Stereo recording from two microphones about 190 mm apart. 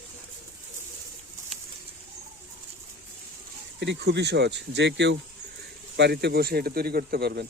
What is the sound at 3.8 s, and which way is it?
Speech, 65° right (ahead or behind).